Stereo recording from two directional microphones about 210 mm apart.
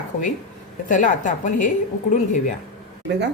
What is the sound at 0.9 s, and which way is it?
Speech, 35° left (ahead or behind).